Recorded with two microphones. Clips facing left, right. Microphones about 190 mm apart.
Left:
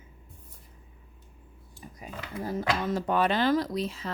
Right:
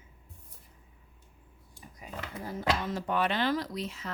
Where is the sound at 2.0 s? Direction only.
35° left (ahead or behind).